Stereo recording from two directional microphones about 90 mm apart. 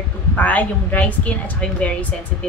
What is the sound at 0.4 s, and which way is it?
A woman's voice, 15° left (ahead or behind).